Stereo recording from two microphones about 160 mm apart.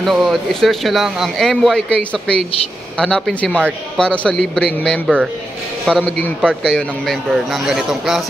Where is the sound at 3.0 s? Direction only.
5° left (ahead or behind).